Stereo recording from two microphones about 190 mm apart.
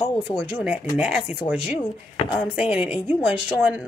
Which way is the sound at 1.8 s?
25° left (ahead or behind).